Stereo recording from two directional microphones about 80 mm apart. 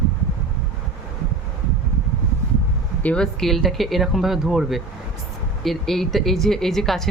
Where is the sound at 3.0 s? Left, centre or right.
Centre.